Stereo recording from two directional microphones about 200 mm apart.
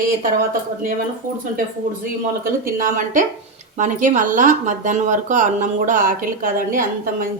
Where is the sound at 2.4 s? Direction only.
45° right (ahead or behind).